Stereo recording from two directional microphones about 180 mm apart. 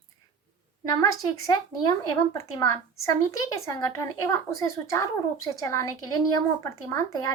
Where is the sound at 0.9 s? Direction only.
20° left (ahead or behind).